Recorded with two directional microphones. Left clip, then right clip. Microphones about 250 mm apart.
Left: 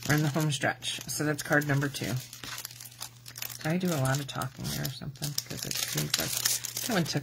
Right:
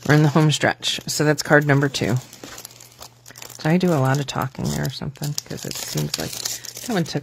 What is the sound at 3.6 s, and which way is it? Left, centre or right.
Speech, right.